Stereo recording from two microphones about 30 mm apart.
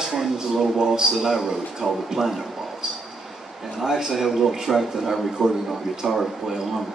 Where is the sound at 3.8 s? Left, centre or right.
Centre.